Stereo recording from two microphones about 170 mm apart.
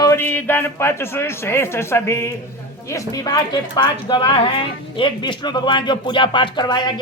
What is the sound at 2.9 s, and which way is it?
Speech, 20° left (ahead or behind).